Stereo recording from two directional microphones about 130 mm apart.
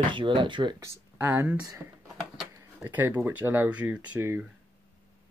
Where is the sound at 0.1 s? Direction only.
40° right (ahead or behind).